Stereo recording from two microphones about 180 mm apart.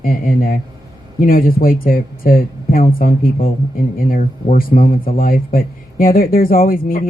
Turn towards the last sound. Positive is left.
turn(degrees=50)  # may be behind; listen again after turning